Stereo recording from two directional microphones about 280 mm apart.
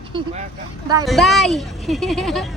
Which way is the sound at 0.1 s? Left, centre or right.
Centre.